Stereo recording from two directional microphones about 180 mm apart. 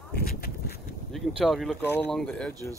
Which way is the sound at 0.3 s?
60° left (ahead or behind).